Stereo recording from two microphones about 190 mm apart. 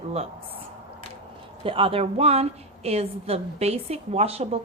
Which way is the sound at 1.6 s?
30° right (ahead or behind).